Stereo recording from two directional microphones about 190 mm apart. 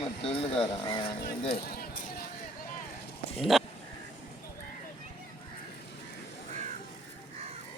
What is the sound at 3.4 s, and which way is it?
Speech, centre (ahead or behind).